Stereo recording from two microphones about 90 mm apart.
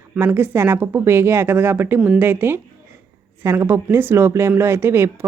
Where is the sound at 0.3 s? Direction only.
25° right (ahead or behind).